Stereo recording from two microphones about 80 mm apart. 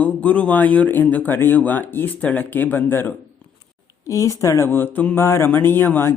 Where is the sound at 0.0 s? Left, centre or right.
Centre.